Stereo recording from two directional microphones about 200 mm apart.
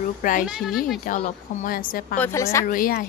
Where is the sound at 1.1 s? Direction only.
45° left (ahead or behind).